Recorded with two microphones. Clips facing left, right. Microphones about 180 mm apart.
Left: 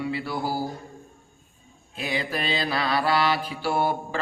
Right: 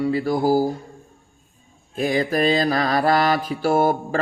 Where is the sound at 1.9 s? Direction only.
45° right (ahead or behind).